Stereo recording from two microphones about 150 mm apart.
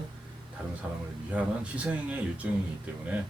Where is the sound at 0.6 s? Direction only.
10° right (ahead or behind).